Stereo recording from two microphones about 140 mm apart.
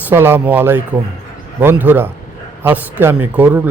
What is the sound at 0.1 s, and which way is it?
Speech, 15° right (ahead or behind).